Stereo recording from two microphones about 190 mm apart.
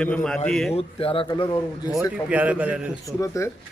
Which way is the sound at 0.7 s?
30° left (ahead or behind).